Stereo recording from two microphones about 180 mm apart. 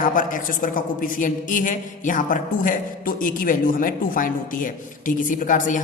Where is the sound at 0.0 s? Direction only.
50° left (ahead or behind).